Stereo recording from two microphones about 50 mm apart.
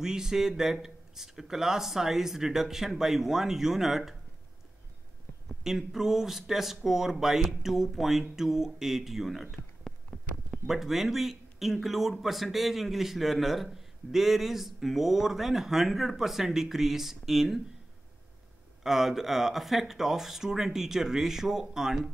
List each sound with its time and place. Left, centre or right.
0.0 s a man's voice: centre
5.6 s a man's voice: centre
10.1 s a sound: left
10.5 s speech: centre
18.8 s speech: centre